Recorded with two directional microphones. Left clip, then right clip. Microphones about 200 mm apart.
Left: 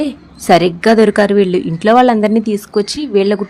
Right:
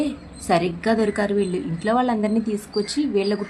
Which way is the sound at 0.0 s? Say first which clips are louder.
Left 7 dB; 40° left (ahead or behind).